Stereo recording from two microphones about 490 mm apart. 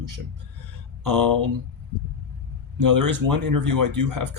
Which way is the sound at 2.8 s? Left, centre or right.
Right.